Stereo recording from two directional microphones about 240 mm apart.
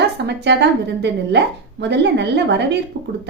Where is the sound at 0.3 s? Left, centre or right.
Right.